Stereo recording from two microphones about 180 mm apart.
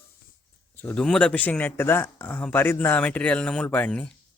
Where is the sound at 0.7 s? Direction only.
10° left (ahead or behind).